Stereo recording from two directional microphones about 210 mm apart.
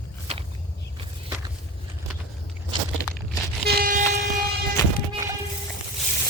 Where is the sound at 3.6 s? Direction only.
45° right (ahead or behind).